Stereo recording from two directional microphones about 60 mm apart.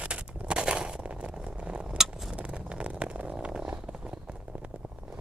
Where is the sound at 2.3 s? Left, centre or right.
Centre.